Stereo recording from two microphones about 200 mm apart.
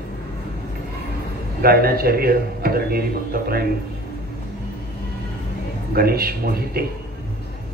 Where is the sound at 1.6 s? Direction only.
50° right (ahead or behind).